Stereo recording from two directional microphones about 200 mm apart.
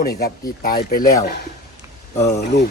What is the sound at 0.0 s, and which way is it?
Speech, 50° left (ahead or behind).